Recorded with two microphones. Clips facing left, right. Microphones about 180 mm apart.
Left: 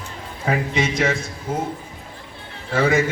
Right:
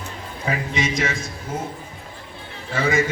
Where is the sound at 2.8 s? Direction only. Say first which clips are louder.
Left 3 dB; 60° left (ahead or behind).